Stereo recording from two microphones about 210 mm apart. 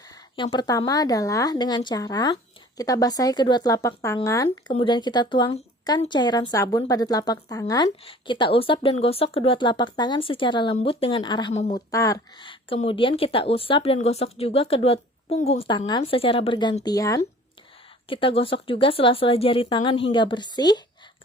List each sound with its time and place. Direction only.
0.3 s speech: 25° left (ahead or behind)
4.4 s speech: 25° left (ahead or behind)